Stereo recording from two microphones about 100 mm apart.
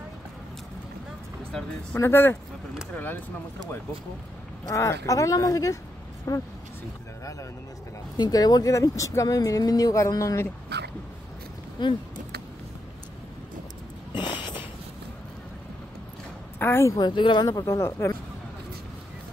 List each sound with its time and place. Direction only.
2.0 s speech: 25° left (ahead or behind)
4.6 s speech: 30° left (ahead or behind)
8.2 s speech: 40° left (ahead or behind)
11.8 s speech: 45° left (ahead or behind)
14.1 s a sound: 50° left (ahead or behind)
16.5 s a woman's voice: 25° left (ahead or behind)
16.9 s speech: 50° left (ahead or behind)
17.5 s speech: 30° left (ahead or behind)